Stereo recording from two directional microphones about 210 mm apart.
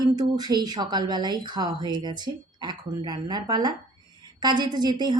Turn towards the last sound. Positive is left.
turn(degrees=-20)  # may be behind; listen again after turning